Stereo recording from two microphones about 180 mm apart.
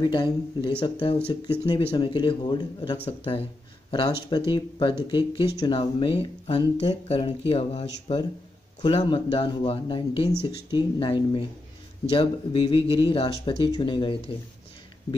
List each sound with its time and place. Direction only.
0.0 s speech: 25° left (ahead or behind)